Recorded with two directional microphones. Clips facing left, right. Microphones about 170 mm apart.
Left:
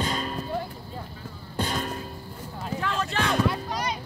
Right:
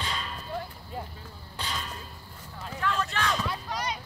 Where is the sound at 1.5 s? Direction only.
50° left (ahead or behind).